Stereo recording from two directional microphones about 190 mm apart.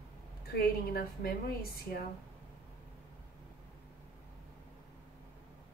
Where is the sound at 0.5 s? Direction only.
50° left (ahead or behind).